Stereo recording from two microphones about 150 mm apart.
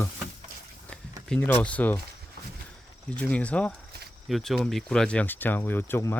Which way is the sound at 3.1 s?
10° left (ahead or behind).